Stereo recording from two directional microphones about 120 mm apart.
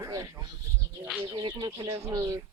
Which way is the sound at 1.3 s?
40° right (ahead or behind).